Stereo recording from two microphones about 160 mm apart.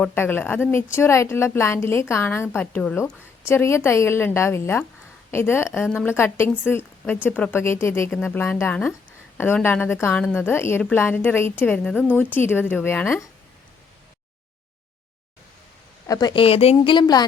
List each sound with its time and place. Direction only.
0.0 s speech: 15° left (ahead or behind)
16.0 s a woman's voice: 25° left (ahead or behind)